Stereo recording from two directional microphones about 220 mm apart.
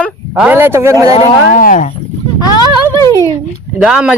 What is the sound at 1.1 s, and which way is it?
Speech, 35° left (ahead or behind).